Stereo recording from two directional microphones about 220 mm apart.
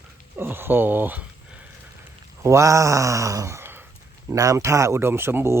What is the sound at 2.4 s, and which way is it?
Speech, 15° right (ahead or behind).